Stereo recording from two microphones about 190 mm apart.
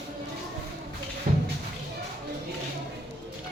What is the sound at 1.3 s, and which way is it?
Music, 45° right (ahead or behind).